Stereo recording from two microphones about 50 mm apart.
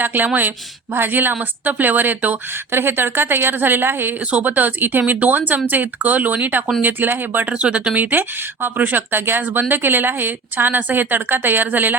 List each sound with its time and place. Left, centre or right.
0.0 s a woman's voice: right
2.7 s a woman's voice: right
4.3 s a woman's voice: right
7.5 s speech: right
7.9 s a woman's voice: right